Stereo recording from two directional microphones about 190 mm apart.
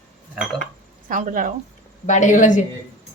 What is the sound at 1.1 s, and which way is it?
Speech, 45° right (ahead or behind).